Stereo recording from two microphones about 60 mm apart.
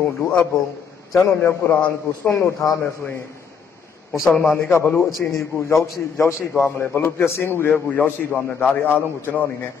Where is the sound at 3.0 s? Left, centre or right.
Left.